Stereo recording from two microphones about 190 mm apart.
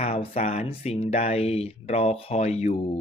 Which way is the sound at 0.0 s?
35° left (ahead or behind).